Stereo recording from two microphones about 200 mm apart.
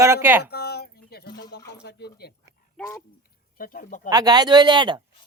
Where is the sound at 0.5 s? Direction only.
55° left (ahead or behind).